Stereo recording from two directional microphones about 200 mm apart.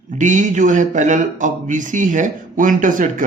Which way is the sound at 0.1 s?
40° right (ahead or behind).